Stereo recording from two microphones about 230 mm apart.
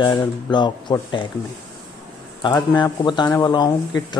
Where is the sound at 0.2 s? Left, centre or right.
Centre.